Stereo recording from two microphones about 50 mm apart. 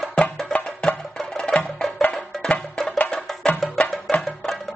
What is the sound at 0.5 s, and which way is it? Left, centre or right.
Music, centre.